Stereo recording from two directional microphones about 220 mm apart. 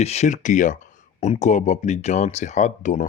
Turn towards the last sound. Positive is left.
turn(degrees=35)  # may be behind; listen again after turning